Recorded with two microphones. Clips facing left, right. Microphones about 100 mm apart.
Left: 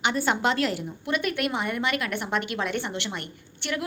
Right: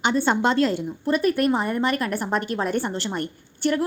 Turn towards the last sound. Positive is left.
turn(degrees=-40)  # may be behind; listen again after turning